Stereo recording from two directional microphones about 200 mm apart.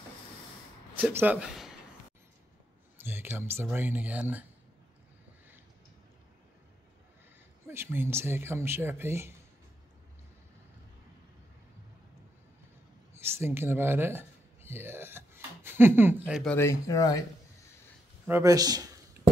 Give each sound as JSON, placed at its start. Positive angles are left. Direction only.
{"t": 0.9, "sound": "a man's voice", "side_deg": -10}
{"t": 3.0, "sound": "a sound", "side_deg": -10}
{"t": 3.6, "sound": "speech", "side_deg": -10}
{"t": 7.6, "sound": "speech", "side_deg": -10}
{"t": 13.1, "sound": "speech", "side_deg": -10}
{"t": 16.5, "sound": "speech", "side_deg": 15}
{"t": 18.2, "sound": "speech", "side_deg": -15}